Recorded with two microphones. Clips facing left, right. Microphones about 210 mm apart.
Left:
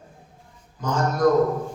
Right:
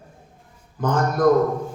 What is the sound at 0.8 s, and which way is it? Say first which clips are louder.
Speech: right 4 dB; 55° right (ahead or behind).